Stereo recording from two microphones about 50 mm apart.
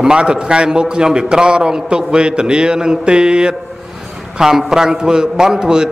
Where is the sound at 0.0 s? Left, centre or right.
Centre.